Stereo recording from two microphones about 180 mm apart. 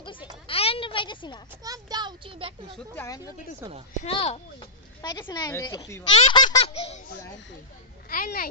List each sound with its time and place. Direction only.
0.5 s a sound: 30° left (ahead or behind)
1.6 s a child's voice: 20° right (ahead or behind)
3.0 s speech: 20° left (ahead or behind)
4.0 s speech: 35° left (ahead or behind)
5.3 s speech: 20° left (ahead or behind)
6.6 s laughter: 35° left (ahead or behind)
8.1 s a child's voice: 50° left (ahead or behind)